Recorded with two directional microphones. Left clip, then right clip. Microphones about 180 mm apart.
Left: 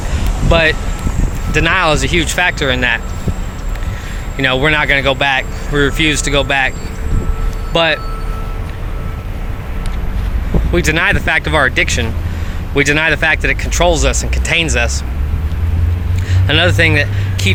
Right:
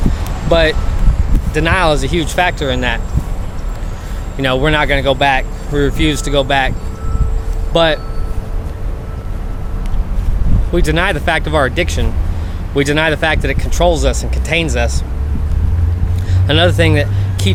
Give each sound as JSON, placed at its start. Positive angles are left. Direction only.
{"t": 0.4, "sound": "speech", "side_deg": -10}
{"t": 4.4, "sound": "speech", "side_deg": -5}
{"t": 10.7, "sound": "speech", "side_deg": -10}
{"t": 16.5, "sound": "speech", "side_deg": -10}